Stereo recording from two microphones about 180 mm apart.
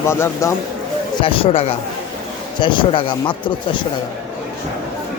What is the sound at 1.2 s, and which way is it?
Speech, 30° left (ahead or behind).